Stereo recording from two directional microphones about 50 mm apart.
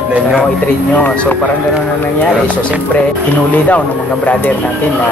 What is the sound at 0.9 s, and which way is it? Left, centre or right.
Speech, left.